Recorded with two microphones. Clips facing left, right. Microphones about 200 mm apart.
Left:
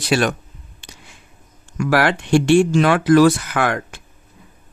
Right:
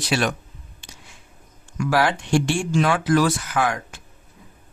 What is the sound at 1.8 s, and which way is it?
Speech, 70° left (ahead or behind).